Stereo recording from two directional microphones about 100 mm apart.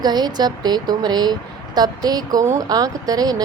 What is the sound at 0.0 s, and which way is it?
A woman's voice, 45° right (ahead or behind).